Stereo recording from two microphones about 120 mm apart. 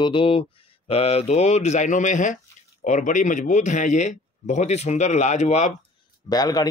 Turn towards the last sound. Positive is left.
turn(degrees=35)  # may be behind; listen again after turning